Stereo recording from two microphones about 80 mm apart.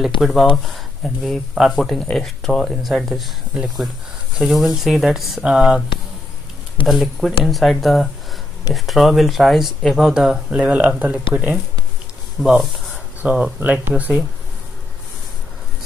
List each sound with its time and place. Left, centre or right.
0.2 s speech: centre
6.9 s speech: centre
12.4 s speech: centre
13.2 s speech: right